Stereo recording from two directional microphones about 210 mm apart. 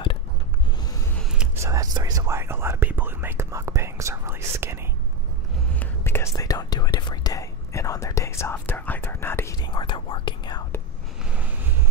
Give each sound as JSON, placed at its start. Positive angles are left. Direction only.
{"t": 1.3, "sound": "whispering", "side_deg": -5}
{"t": 1.7, "sound": "whispering", "side_deg": -15}
{"t": 5.8, "sound": "whispering", "side_deg": 10}